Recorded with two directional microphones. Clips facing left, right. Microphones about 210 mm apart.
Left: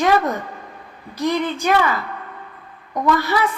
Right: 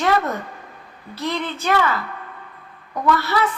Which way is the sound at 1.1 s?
15° left (ahead or behind).